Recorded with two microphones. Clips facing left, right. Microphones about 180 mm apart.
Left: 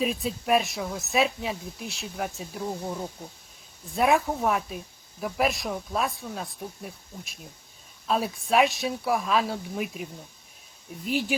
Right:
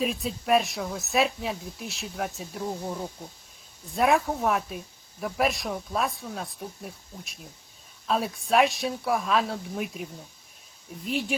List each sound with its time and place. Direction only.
0.0 s speech: centre (ahead or behind)